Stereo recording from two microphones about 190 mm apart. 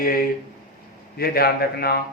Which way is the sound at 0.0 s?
50° left (ahead or behind).